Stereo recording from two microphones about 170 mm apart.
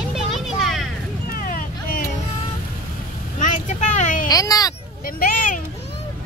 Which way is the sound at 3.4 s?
45° left (ahead or behind).